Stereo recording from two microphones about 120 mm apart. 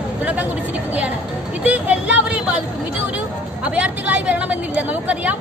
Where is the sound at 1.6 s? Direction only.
10° right (ahead or behind).